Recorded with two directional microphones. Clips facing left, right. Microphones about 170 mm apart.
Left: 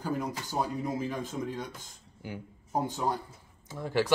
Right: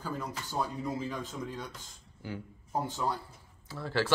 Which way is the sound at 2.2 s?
15° left (ahead or behind).